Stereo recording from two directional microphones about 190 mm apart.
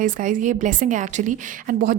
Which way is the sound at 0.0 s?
45° right (ahead or behind).